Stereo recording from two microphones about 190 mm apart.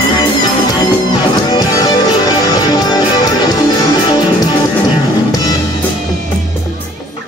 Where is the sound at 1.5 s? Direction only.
20° left (ahead or behind).